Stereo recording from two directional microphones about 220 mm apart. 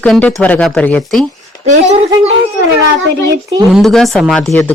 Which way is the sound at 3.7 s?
Centre (ahead or behind).